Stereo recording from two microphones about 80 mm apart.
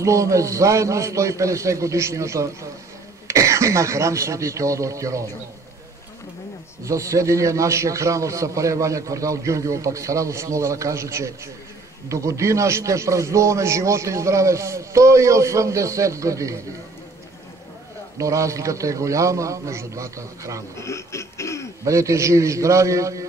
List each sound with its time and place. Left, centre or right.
0.0 s a man's voice: right
6.8 s a man's voice: right
18.1 s a man's voice: right
20.7 s baby laughter: left
21.8 s a man's voice: right